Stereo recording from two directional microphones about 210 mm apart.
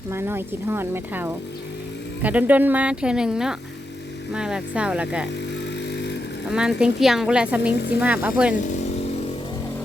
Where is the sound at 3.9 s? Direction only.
55° left (ahead or behind).